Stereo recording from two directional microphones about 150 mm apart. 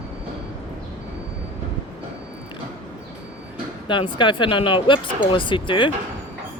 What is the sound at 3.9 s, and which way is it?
Speech, 30° left (ahead or behind).